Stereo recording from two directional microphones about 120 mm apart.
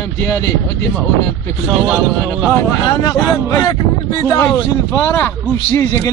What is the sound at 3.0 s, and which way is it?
Speech, 30° left (ahead or behind).